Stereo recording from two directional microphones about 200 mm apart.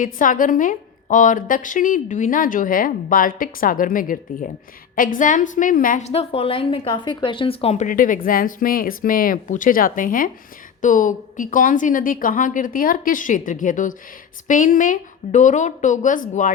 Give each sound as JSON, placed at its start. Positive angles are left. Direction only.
{"t": 0.0, "sound": "a woman's voice", "side_deg": 40}